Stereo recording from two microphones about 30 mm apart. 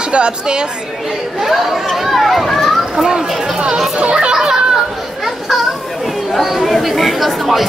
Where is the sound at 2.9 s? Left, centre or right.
Right.